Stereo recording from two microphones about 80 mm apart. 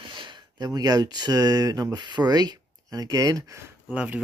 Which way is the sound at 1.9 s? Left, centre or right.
Right.